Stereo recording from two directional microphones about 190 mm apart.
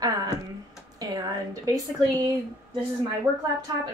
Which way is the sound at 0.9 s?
20° right (ahead or behind).